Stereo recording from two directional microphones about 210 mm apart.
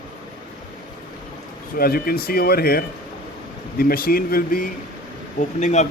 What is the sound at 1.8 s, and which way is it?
Speech, 45° left (ahead or behind).